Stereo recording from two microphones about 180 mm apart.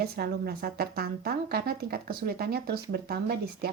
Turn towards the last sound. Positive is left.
turn(degrees=-60)  # may be behind; listen again after turning